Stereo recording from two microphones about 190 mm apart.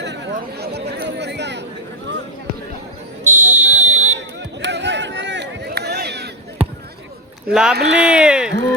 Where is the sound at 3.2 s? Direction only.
40° right (ahead or behind).